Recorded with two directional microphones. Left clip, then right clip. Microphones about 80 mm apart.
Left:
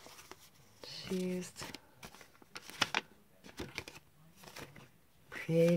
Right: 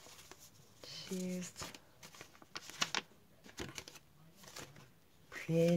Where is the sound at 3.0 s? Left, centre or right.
Left.